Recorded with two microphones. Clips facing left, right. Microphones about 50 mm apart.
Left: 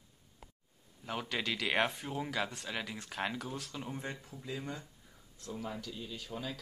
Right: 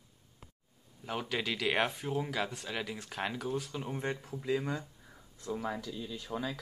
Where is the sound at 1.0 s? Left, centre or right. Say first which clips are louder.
Right 2 dB; centre.